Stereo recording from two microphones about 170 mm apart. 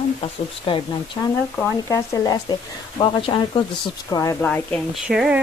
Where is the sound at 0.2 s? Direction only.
30° left (ahead or behind).